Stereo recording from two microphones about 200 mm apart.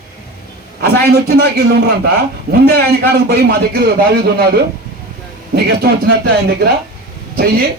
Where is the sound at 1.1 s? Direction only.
50° right (ahead or behind).